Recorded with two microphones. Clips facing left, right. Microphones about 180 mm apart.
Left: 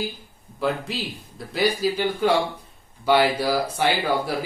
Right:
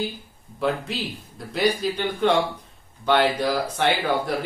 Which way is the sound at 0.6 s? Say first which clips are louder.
Even; centre (ahead or behind).